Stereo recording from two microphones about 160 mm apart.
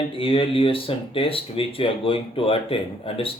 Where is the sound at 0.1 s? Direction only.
35° left (ahead or behind).